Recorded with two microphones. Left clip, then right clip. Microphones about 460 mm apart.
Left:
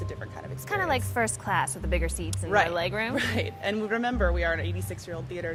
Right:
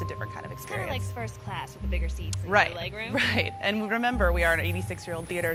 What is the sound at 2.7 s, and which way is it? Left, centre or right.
Speech, left.